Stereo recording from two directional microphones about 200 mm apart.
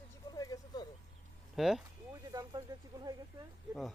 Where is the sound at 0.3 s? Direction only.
20° left (ahead or behind).